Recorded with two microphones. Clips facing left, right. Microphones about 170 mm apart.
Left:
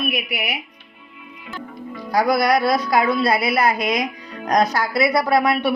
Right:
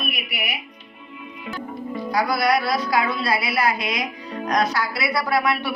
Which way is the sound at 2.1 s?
45° left (ahead or behind).